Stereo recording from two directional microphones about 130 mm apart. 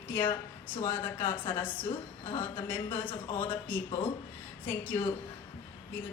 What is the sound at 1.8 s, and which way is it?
A woman's voice, 40° left (ahead or behind).